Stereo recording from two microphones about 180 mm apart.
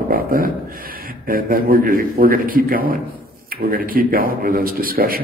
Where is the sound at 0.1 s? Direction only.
55° right (ahead or behind).